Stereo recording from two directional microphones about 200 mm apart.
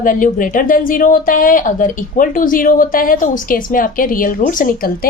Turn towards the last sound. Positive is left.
turn(degrees=45)  # may be behind; listen again after turning